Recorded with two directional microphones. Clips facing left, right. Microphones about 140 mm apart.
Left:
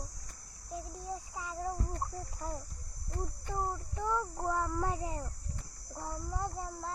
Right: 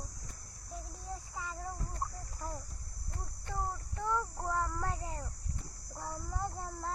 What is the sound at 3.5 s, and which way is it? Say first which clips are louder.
A child's voice: left 1 dB; 15° left (ahead or behind).